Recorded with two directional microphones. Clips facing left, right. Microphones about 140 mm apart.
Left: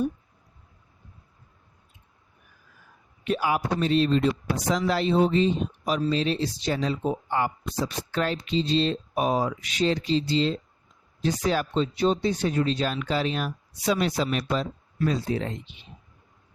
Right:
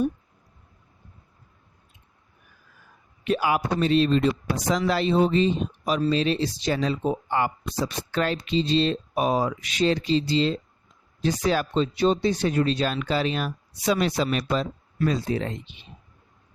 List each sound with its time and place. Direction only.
3.2 s speech: 90° right